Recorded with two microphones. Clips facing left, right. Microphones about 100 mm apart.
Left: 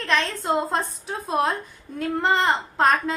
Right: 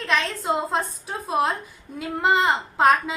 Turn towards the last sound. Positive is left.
turn(degrees=-5)  # may be behind; listen again after turning